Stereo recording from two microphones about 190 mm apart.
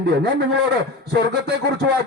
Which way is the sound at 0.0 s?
60° right (ahead or behind).